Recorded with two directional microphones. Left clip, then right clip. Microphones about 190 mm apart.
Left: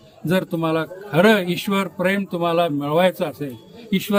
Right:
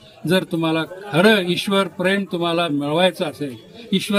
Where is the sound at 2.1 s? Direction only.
35° left (ahead or behind).